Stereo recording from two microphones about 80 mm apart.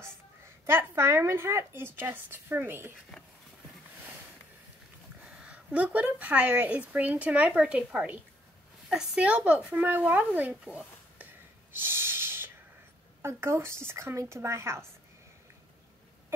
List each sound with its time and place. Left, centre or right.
0.7 s speech: right
5.2 s a woman's voice: centre
11.7 s snort: right
13.2 s a woman's voice: right